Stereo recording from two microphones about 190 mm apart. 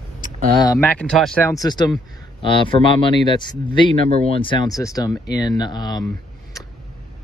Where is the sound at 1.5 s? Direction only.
20° left (ahead or behind).